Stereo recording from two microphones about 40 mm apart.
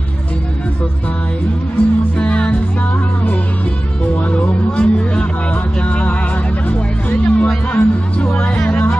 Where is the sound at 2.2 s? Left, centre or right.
Left.